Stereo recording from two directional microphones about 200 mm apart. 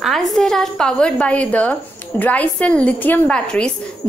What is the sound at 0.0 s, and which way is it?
A woman's voice, centre (ahead or behind).